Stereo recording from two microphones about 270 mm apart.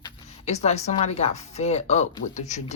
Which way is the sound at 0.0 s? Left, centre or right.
Left.